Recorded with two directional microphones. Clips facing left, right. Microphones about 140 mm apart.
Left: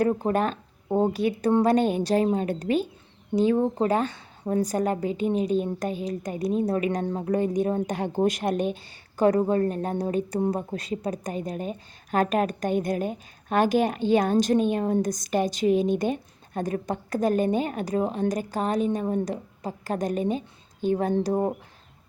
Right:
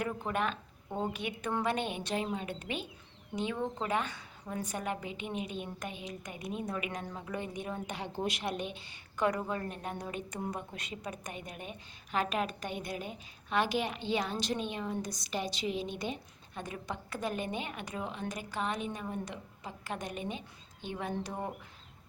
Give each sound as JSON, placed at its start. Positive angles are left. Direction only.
{"t": 0.0, "sound": "a woman's voice", "side_deg": 35}